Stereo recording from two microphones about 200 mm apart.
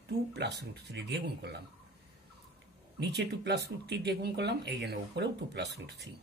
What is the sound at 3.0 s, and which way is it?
Speech, 60° right (ahead or behind).